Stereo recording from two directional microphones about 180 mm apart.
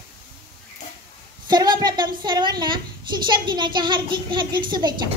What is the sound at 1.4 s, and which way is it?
A woman's voice, 25° right (ahead or behind).